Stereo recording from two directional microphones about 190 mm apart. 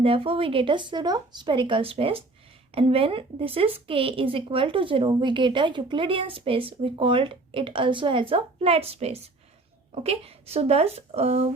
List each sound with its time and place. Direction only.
0.0 s speech: 30° right (ahead or behind)